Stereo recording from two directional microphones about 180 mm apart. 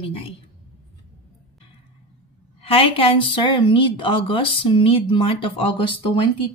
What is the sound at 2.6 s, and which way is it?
Speech, 30° left (ahead or behind).